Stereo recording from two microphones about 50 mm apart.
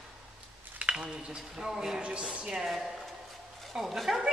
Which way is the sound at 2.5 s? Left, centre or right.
Centre.